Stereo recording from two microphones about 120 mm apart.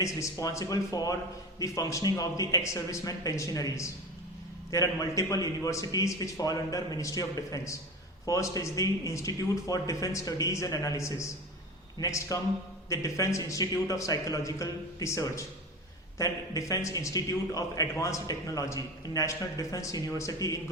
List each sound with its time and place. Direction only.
0.0 s a man's voice: 25° left (ahead or behind)